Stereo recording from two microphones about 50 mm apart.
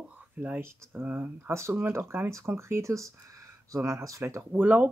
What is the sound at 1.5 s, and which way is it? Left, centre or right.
Speech, right.